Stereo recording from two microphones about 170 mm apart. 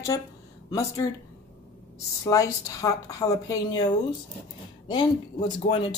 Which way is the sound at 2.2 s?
20° left (ahead or behind).